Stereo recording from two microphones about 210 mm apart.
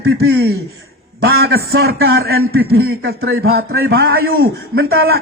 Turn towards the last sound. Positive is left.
turn(degrees=-45)  # may be behind; listen again after turning